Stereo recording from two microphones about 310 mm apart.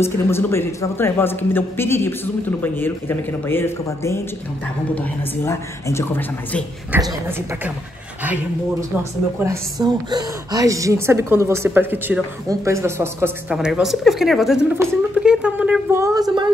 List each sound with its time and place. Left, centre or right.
0.0 s speech: centre
6.9 s a woman's voice: centre
9.4 s a woman's voice: centre